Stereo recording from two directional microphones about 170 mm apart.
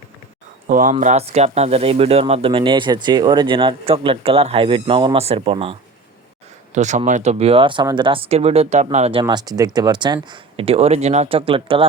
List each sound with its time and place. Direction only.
0.7 s speech: 50° right (ahead or behind); by 5.7 s 35° right (ahead or behind)
6.7 s speech: 45° right (ahead or behind)
9.2 s speech: 20° right (ahead or behind)